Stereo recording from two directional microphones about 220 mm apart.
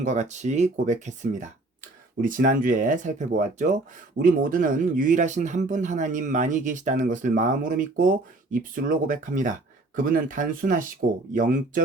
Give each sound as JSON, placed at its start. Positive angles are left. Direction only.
{"t": 0.0, "sound": "speech", "side_deg": -30}